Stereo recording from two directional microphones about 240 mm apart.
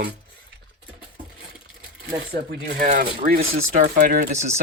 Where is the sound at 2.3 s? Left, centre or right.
Right.